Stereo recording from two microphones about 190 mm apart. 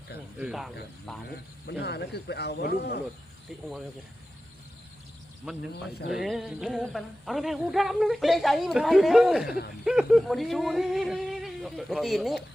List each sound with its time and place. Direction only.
0.3 s speech: 5° right (ahead or behind)
1.8 s a man's voice: 60° left (ahead or behind)
3.5 s speech: centre (ahead or behind)
6.2 s speech: centre (ahead or behind)